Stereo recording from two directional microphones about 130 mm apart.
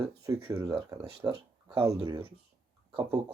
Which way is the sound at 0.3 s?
30° right (ahead or behind).